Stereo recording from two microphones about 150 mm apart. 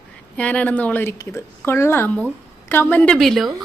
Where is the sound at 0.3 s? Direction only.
10° left (ahead or behind).